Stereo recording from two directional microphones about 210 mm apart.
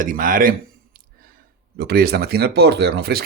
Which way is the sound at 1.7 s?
50° right (ahead or behind).